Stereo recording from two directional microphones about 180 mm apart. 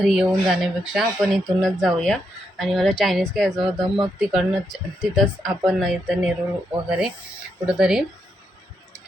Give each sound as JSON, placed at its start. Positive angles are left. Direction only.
{"t": 0.0, "sound": "speech", "side_deg": 0}